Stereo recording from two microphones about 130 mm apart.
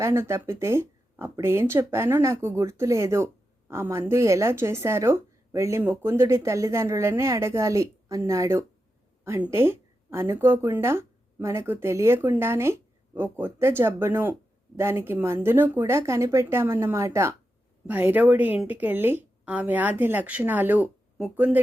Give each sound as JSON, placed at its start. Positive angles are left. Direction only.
{"t": 0.0, "sound": "speech", "side_deg": -20}